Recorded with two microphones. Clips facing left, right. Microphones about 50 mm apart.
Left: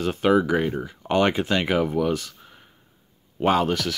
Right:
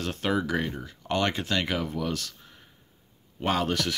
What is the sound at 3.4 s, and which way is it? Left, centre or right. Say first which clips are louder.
Speech: left 6 dB; centre.